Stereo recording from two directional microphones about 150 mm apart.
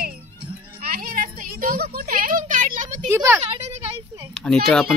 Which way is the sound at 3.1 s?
15° right (ahead or behind).